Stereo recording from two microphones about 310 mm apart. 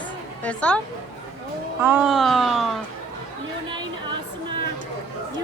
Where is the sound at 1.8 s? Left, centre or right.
Centre.